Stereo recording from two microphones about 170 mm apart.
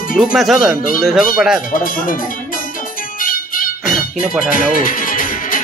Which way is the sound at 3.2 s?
55° left (ahead or behind).